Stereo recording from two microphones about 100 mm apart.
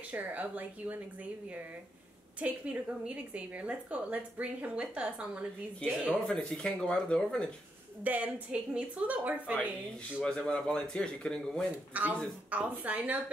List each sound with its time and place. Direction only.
0.1 s a woman's voice: 15° right (ahead or behind)
2.4 s a woman's voice: 15° right (ahead or behind)
6.2 s speech: 5° left (ahead or behind)
8.0 s a woman's voice: 15° right (ahead or behind)
10.2 s speech: 10° left (ahead or behind)
11.9 s a woman's voice: 15° right (ahead or behind)